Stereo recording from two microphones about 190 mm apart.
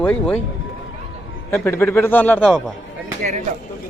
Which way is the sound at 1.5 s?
15° left (ahead or behind).